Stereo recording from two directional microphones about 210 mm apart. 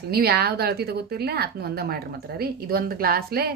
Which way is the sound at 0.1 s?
50° right (ahead or behind).